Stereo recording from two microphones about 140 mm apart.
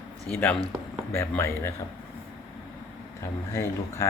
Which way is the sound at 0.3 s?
10° left (ahead or behind).